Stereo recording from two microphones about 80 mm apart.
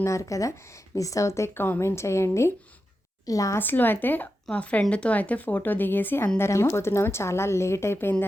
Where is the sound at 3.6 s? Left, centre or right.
Left.